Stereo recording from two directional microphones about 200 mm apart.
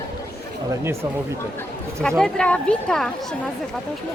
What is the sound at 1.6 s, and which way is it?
A woman's voice, 5° left (ahead or behind).